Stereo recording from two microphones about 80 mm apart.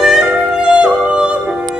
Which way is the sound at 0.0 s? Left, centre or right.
Centre.